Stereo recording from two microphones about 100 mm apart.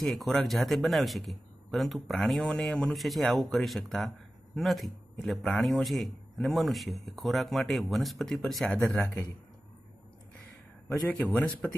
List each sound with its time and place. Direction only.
0.0 s a man's voice: centre (ahead or behind)
9.0 s a man's voice: 25° left (ahead or behind)
11.3 s speech: 15° left (ahead or behind)